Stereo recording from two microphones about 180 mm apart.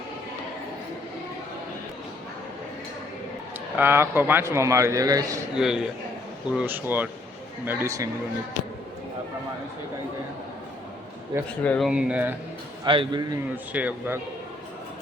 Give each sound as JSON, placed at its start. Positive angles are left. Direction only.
{"t": 3.8, "sound": "a man's voice", "side_deg": -15}
{"t": 5.5, "sound": "a man's voice", "side_deg": -5}
{"t": 11.6, "sound": "speech", "side_deg": 5}
{"t": 11.9, "sound": "a man's voice", "side_deg": -5}
{"t": 12.8, "sound": "a man's voice", "side_deg": -25}
{"t": 13.7, "sound": "a man's voice", "side_deg": -10}